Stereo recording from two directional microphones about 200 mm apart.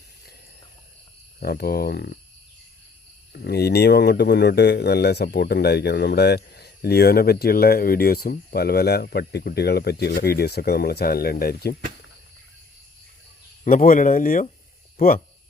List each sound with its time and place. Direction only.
1.4 s speech: 50° left (ahead or behind)
3.3 s speech: 55° left (ahead or behind)
13.7 s speech: 45° left (ahead or behind)